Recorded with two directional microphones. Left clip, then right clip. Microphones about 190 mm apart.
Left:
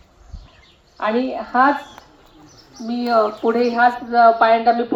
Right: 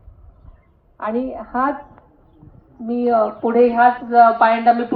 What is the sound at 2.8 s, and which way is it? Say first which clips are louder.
A woman's voice: even; 35° right (ahead or behind).